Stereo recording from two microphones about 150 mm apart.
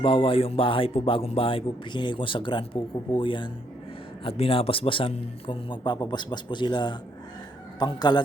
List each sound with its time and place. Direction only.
0.0 s a man's voice: 35° left (ahead or behind)